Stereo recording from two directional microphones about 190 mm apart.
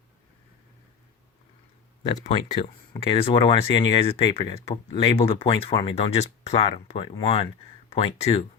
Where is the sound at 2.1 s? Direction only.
40° left (ahead or behind).